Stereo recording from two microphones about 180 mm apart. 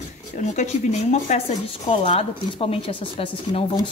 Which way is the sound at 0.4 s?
45° left (ahead or behind).